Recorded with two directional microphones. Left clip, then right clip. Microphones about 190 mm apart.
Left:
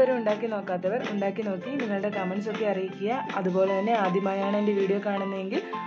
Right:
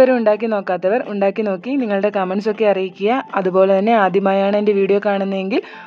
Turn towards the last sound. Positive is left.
turn(degrees=-60)  # may be behind; listen again after turning